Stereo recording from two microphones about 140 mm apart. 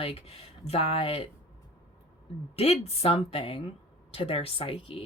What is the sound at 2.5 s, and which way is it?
Speech, 50° left (ahead or behind).